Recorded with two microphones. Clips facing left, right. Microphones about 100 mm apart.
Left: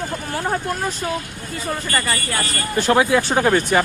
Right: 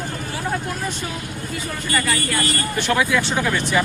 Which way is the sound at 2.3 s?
30° left (ahead or behind).